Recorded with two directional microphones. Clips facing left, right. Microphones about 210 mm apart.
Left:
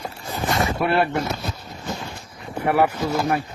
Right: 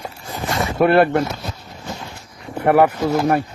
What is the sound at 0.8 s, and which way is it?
Speech, 55° right (ahead or behind).